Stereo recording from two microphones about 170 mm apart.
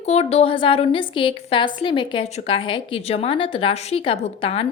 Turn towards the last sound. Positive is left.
turn(degrees=35)  # may be behind; listen again after turning